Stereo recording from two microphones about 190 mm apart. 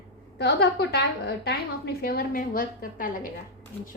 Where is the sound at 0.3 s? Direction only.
60° left (ahead or behind); by 3.2 s 45° left (ahead or behind).